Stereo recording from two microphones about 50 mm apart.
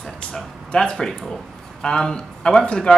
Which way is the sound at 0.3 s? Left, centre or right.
Centre.